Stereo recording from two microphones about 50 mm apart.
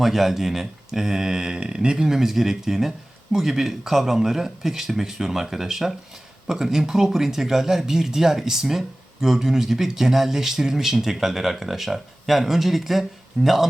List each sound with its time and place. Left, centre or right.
0.0 s speech: centre